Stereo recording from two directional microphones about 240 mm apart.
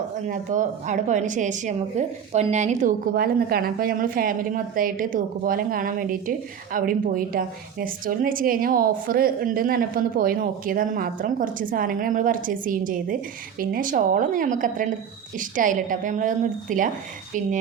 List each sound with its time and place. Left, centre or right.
0.3 s a woman's voice: right